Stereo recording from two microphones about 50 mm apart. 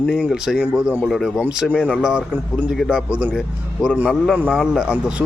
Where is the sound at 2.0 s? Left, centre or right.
Centre.